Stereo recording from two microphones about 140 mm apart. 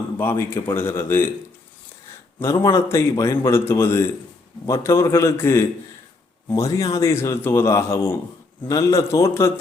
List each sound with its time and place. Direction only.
0.2 s a man's voice: 15° left (ahead or behind)
2.4 s a man's voice: 20° left (ahead or behind)